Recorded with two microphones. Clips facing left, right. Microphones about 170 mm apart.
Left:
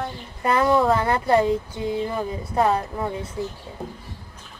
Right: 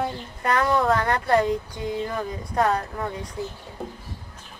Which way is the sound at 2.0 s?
15° left (ahead or behind).